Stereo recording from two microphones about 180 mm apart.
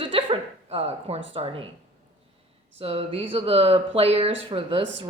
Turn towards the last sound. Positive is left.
turn(degrees=-30)  # may be behind; listen again after turning